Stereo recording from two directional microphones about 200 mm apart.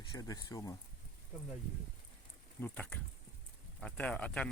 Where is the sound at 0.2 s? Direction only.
20° left (ahead or behind).